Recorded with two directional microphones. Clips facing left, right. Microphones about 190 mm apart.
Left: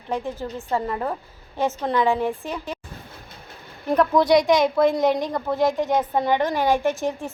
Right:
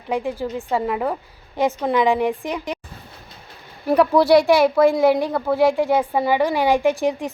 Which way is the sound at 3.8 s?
10° right (ahead or behind).